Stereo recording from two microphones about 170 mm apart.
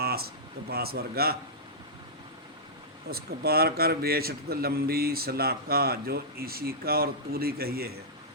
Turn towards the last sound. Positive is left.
turn(degrees=-65)  # may be behind; listen again after turning